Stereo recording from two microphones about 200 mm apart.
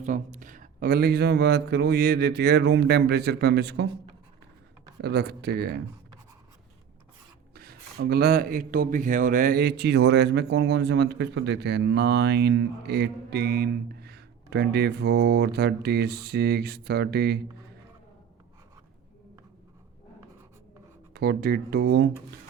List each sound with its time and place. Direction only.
0.0 s speech: 40° right (ahead or behind); by 3.8 s 55° right (ahead or behind)
5.0 s speech: 55° right (ahead or behind)
7.5 s speech: 50° right (ahead or behind)
21.1 s speech: 50° right (ahead or behind)